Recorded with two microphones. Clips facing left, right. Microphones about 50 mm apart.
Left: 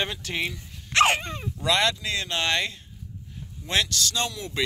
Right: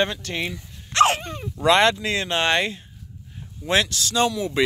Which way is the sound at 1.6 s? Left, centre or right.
Right.